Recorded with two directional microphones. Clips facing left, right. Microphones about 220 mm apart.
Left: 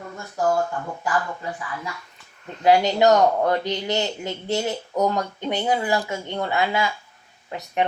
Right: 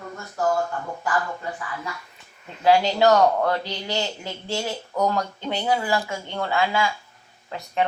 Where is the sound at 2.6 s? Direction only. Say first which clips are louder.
Left 1 dB; 20° left (ahead or behind).